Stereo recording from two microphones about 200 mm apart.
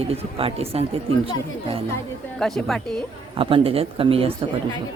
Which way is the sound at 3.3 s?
25° right (ahead or behind).